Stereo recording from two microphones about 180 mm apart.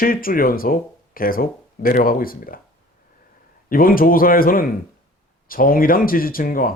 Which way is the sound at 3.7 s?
55° left (ahead or behind).